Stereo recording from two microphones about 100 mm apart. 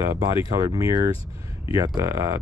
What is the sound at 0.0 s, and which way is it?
Speech, 30° right (ahead or behind).